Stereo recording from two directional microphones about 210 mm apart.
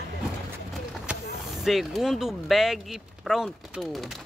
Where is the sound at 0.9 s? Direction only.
Centre (ahead or behind).